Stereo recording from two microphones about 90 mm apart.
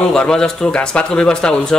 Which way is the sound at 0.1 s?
10° left (ahead or behind).